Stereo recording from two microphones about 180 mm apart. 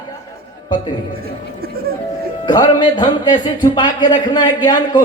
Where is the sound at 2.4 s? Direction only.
25° left (ahead or behind).